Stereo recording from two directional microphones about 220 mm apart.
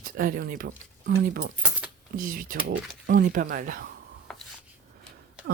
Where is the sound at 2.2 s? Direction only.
40° right (ahead or behind).